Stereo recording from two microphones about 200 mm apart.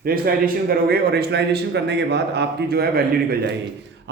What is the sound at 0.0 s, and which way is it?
A man's voice, 45° right (ahead or behind).